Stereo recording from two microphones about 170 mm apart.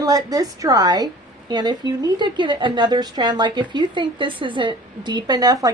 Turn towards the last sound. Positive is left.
turn(degrees=-20)  # may be behind; listen again after turning